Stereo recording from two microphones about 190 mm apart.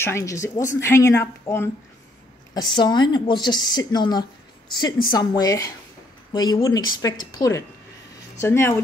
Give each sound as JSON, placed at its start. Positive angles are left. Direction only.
{"t": 0.0, "sound": "a woman's voice", "side_deg": 15}
{"t": 2.7, "sound": "a woman's voice", "side_deg": 25}